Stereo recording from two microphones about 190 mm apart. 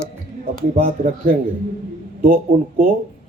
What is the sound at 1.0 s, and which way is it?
Speech, 45° right (ahead or behind).